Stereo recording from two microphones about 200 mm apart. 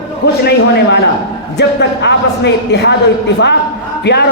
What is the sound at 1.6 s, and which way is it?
A man's voice, 60° left (ahead or behind).